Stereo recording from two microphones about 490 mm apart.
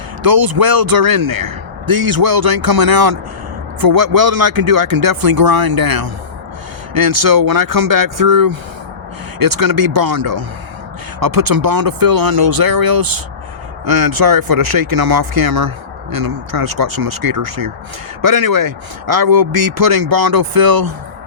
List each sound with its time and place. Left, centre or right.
0.2 s speech: right